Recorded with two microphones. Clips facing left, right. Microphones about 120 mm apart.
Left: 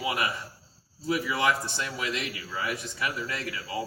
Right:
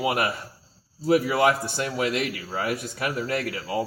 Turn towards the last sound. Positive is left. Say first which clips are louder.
# right 6 dB
turn(degrees=-55)  # may be behind; listen again after turning